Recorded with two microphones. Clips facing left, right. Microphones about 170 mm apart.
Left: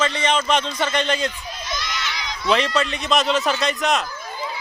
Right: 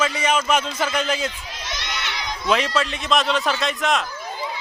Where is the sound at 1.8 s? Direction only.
65° right (ahead or behind).